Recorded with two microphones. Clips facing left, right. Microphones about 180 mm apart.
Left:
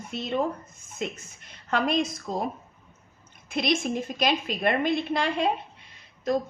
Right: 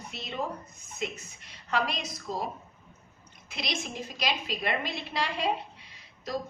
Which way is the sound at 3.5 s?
50° left (ahead or behind).